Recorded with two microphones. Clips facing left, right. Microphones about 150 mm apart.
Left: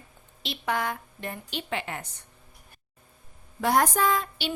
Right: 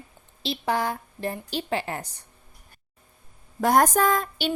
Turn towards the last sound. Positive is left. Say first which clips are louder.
# right 3 dB
turn(degrees=-45)  # may be behind; listen again after turning